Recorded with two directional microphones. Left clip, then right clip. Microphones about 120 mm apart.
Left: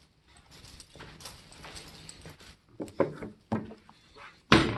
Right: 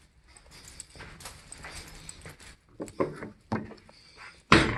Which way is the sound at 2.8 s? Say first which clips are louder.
Left 1 dB; 50° left (ahead or behind).